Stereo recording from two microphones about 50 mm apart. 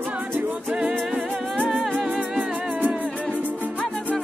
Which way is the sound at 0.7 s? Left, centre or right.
Centre.